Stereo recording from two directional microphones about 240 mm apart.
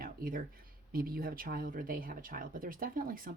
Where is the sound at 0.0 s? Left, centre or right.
Right.